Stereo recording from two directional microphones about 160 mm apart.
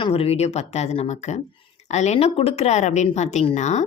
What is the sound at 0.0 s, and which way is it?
Speech, 35° left (ahead or behind).